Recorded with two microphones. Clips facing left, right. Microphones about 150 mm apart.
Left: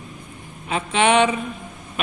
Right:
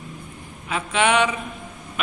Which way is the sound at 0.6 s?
25° left (ahead or behind).